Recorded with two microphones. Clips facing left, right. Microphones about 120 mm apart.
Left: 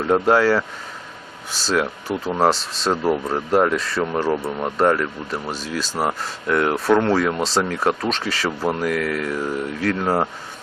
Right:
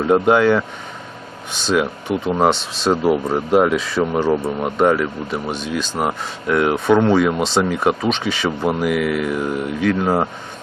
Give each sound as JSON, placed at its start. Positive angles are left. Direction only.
{"t": 0.0, "sound": "speech", "side_deg": 0}
{"t": 1.6, "sound": "speech", "side_deg": 0}